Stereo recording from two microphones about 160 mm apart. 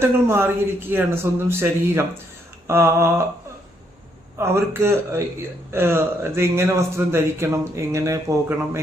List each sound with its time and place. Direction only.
0.0 s a man's voice: 15° right (ahead or behind)
4.4 s a man's voice: 15° right (ahead or behind)